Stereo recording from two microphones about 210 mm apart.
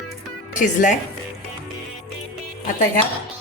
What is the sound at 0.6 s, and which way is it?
Speech, 40° left (ahead or behind).